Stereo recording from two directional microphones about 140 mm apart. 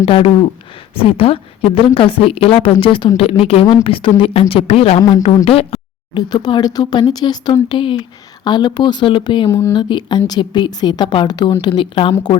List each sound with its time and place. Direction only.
0.0 s a woman's voice: 40° left (ahead or behind)
4.9 s speech: 30° left (ahead or behind)
5.5 s a sound: 45° left (ahead or behind)
6.3 s a woman's voice: 30° left (ahead or behind)
9.5 s speech: 20° left (ahead or behind)
9.7 s a woman's voice: 35° left (ahead or behind)